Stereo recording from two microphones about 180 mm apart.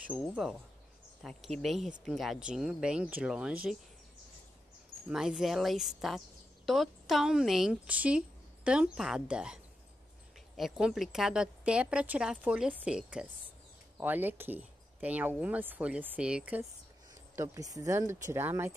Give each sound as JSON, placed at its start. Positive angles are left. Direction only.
{"t": 0.1, "sound": "a woman's voice", "side_deg": 0}
{"t": 5.1, "sound": "a woman's voice", "side_deg": -5}
{"t": 17.4, "sound": "speech", "side_deg": -20}